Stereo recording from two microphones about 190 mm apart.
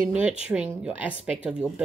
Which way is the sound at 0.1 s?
5° right (ahead or behind).